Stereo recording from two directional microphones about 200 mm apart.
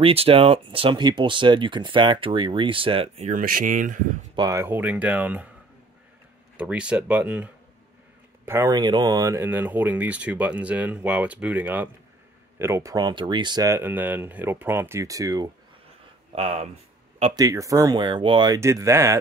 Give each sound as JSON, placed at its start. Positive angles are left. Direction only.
{"t": 0.0, "sound": "speech", "side_deg": -30}
{"t": 4.4, "sound": "speech", "side_deg": -15}
{"t": 6.5, "sound": "speech", "side_deg": -5}
{"t": 16.3, "sound": "speech", "side_deg": -30}
{"t": 17.4, "sound": "speech", "side_deg": -15}